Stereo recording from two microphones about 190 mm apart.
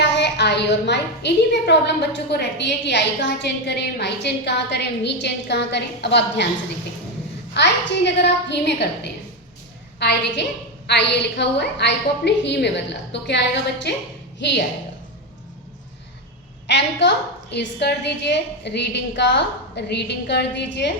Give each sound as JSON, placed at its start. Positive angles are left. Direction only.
{"t": 0.0, "sound": "a woman's voice", "side_deg": 65}
{"t": 7.5, "sound": "a woman's voice", "side_deg": 65}
{"t": 16.6, "sound": "a woman's voice", "side_deg": 70}